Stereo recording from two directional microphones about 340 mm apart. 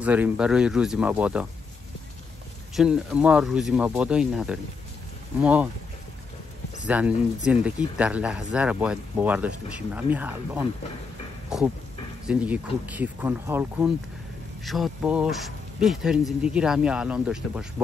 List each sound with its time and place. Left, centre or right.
0.0 s speech: centre
2.7 s speech: centre
6.9 s speech: centre